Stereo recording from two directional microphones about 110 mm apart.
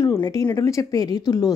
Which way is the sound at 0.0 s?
30° left (ahead or behind).